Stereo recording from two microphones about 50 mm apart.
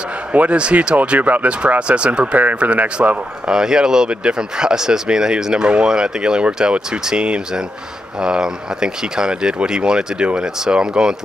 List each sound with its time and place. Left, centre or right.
0.3 s a man's voice: right
3.4 s speech: centre